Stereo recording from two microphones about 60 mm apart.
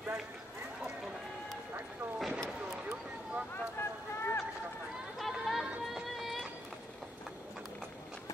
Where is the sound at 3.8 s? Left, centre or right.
Left.